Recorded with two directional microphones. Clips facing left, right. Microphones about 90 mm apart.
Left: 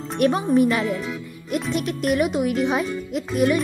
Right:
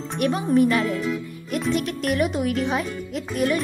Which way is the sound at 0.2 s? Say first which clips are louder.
Left 4 dB; 40° left (ahead or behind).